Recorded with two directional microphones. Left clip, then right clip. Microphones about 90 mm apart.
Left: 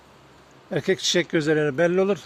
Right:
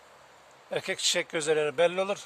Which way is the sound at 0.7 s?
15° left (ahead or behind).